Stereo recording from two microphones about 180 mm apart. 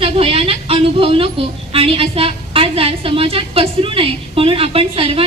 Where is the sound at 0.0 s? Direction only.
30° right (ahead or behind).